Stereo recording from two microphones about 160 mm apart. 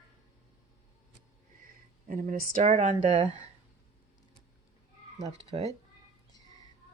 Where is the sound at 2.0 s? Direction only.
55° right (ahead or behind).